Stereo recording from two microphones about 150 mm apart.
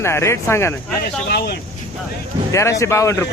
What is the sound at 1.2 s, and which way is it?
Speech, 90° left.